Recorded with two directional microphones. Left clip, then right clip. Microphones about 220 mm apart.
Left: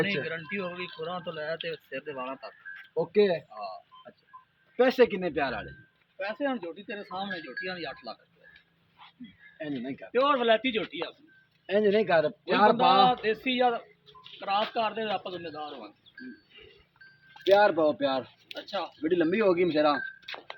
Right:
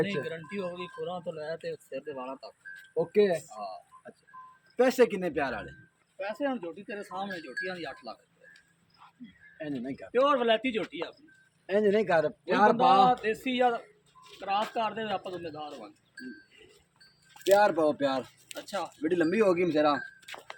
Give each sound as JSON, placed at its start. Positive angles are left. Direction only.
{"t": 0.0, "sound": "speech", "side_deg": -5}
{"t": 3.5, "sound": "speech", "side_deg": 0}
{"t": 4.8, "sound": "speech", "side_deg": -10}
{"t": 6.1, "sound": "speech", "side_deg": 0}
{"t": 9.6, "sound": "speech", "side_deg": -15}
{"t": 10.1, "sound": "speech", "side_deg": 0}
{"t": 11.6, "sound": "a man's voice", "side_deg": -15}
{"t": 13.2, "sound": "speech", "side_deg": 0}
{"t": 17.7, "sound": "speech", "side_deg": -30}
{"t": 18.6, "sound": "speech", "side_deg": -20}
{"t": 19.0, "sound": "speech", "side_deg": -35}
{"t": 20.3, "sound": "speech", "side_deg": 0}